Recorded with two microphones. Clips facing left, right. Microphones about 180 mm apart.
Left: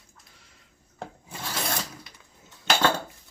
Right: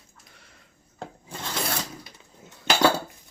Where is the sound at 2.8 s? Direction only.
10° right (ahead or behind).